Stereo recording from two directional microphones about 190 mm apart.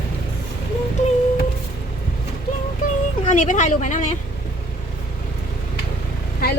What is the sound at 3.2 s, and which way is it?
Speech, 40° left (ahead or behind).